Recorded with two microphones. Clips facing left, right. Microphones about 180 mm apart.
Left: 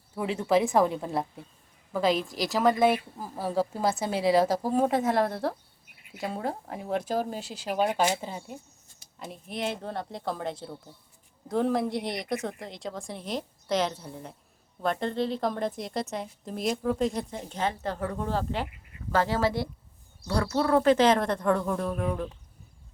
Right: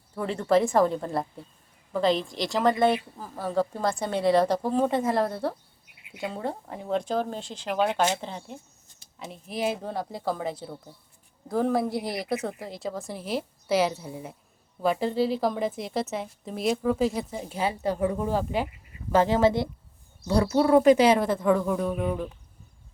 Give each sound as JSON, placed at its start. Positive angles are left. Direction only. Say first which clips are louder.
{"t": 0.2, "sound": "speech", "louder": "right 2 dB", "side_deg": 5}